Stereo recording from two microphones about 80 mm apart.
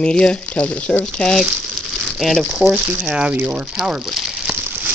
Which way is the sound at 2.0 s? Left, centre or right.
Centre.